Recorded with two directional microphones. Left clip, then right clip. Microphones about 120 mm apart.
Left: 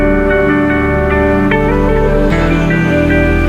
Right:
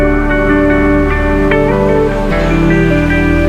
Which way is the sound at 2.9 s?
Centre (ahead or behind).